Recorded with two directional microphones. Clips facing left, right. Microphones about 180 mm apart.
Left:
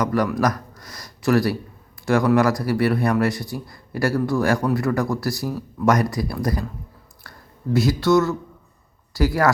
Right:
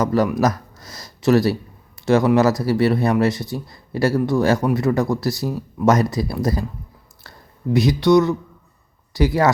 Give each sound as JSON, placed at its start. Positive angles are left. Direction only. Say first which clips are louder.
{"t": 0.0, "sound": "speech", "louder": "right 3 dB", "side_deg": -25}